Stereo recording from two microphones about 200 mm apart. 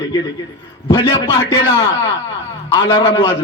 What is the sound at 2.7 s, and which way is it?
Speech, 25° left (ahead or behind).